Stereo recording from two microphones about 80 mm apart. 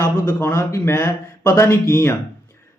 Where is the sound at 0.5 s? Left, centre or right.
Left.